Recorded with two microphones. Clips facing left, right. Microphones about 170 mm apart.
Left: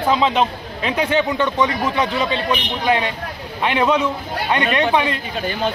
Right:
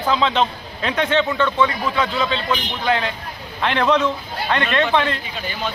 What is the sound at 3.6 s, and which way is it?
A man's voice, 10° left (ahead or behind).